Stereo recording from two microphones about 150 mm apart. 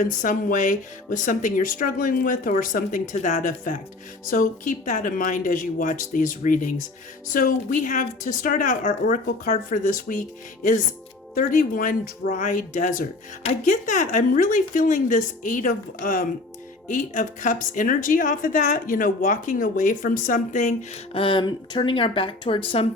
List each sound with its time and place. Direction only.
0.0 s a woman's voice: 60° left (ahead or behind)
21.1 s speech: 35° left (ahead or behind)